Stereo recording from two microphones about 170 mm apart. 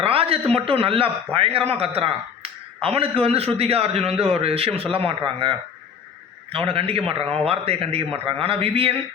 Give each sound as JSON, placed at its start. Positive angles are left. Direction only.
{"t": 0.0, "sound": "a man's voice", "side_deg": -35}